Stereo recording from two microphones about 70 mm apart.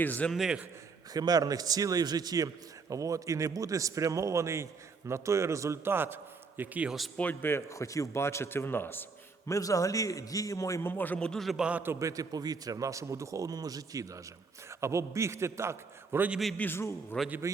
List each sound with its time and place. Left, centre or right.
0.0 s a man's voice: left
0.3 s a man's voice: centre
1.1 s speech: right
2.9 s a man's voice: right
6.6 s a man's voice: right
7.2 s a man's voice: left
7.5 s a man's voice: left
9.5 s a man's voice: left
10.8 s a man's voice: left
11.2 s a man's voice: centre
11.5 s a man's voice: centre
11.9 s speech: right
14.7 s a man's voice: right
16.6 s a man's voice: left